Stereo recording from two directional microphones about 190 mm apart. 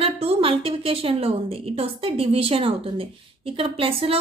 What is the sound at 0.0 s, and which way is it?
A woman's voice, 30° right (ahead or behind).